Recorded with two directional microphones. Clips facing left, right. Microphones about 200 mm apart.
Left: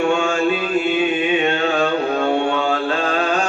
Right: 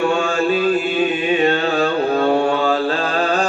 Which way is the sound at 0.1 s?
35° right (ahead or behind).